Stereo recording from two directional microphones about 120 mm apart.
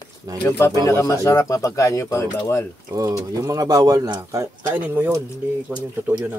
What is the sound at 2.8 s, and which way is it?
Speech, 30° right (ahead or behind).